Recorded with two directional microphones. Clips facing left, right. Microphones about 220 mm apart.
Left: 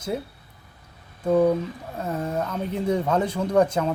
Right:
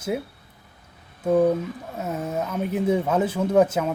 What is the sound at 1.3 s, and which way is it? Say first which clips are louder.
Speech: even; 5° right (ahead or behind).